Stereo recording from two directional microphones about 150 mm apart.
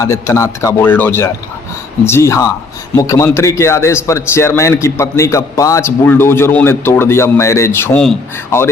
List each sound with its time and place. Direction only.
0.0 s a man's voice: 20° left (ahead or behind)